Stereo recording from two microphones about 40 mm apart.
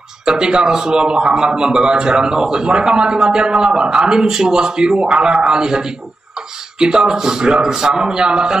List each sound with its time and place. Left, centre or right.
0.2 s a man's voice: centre